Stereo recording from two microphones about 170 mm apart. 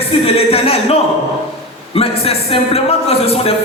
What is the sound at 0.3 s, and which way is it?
A man's voice, 35° left (ahead or behind).